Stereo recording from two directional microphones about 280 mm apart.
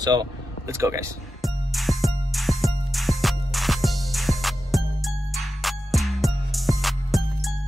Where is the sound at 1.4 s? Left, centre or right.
Centre.